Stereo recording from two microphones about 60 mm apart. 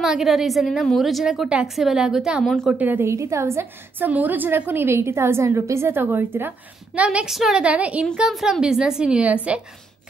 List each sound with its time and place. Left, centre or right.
0.0 s a woman's voice: centre
2.4 s a woman's voice: centre
2.8 s a woman's voice: right
3.1 s a woman's voice: right
4.0 s a woman's voice: right
4.8 s a woman's voice: right
7.0 s a woman's voice: right
7.2 s a woman's voice: centre
7.6 s a woman's voice: right
8.3 s a woman's voice: centre